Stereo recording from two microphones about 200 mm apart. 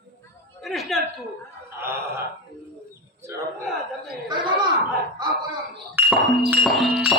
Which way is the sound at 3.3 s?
15° right (ahead or behind).